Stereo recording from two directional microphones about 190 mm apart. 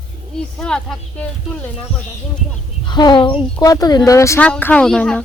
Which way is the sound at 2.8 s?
25° left (ahead or behind).